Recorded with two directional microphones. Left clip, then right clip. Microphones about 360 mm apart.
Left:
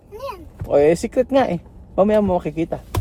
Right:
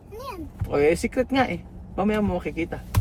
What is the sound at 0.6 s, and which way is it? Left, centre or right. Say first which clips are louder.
Speech: left 6 dB; centre.